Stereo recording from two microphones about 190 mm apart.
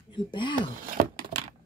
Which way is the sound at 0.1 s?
25° left (ahead or behind).